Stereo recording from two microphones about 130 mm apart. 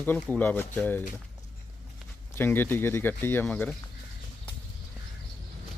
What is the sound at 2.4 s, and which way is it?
Speech, 15° left (ahead or behind).